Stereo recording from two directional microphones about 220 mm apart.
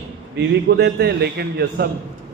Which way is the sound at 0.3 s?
50° right (ahead or behind).